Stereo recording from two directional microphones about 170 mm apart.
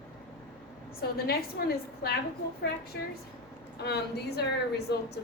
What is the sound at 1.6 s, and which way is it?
Speech, 65° left (ahead or behind).